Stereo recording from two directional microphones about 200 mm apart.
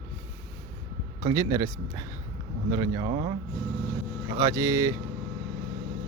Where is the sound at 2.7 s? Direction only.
20° right (ahead or behind).